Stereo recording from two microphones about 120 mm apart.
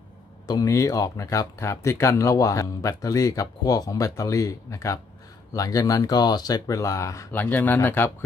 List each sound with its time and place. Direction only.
0.5 s speech: 30° left (ahead or behind)